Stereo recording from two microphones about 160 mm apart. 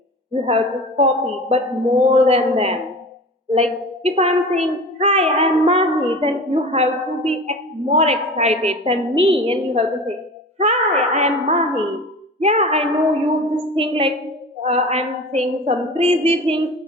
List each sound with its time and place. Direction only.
0.4 s a child's voice: 40° right (ahead or behind)
10.6 s a sound: 45° right (ahead or behind)
13.7 s a child's voice: 35° right (ahead or behind)